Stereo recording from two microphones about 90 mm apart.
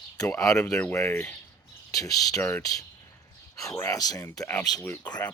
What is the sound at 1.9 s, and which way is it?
Speech, 45° left (ahead or behind).